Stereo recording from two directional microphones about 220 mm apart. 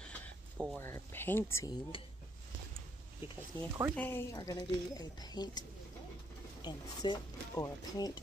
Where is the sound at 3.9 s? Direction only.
10° left (ahead or behind).